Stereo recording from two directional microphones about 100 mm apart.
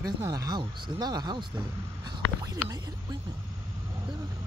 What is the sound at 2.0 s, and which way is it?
Speech, 40° right (ahead or behind).